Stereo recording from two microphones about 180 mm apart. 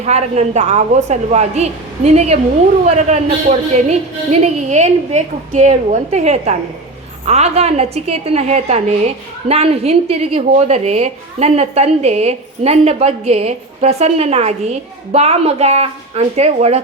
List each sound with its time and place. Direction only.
0.0 s a woman's voice: 40° right (ahead or behind)